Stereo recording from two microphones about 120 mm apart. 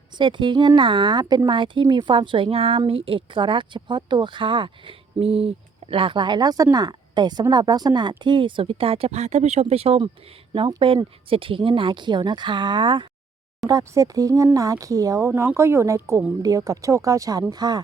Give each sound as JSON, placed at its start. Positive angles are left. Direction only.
{"t": 0.2, "sound": "speech", "side_deg": -40}
{"t": 13.7, "sound": "speech", "side_deg": -30}